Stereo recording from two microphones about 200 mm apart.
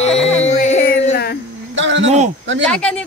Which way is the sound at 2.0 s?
35° right (ahead or behind).